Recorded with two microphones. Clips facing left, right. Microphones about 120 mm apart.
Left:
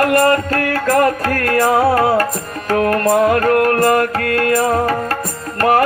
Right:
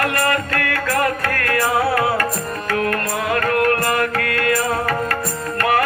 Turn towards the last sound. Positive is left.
turn(degrees=40)  # may be behind; listen again after turning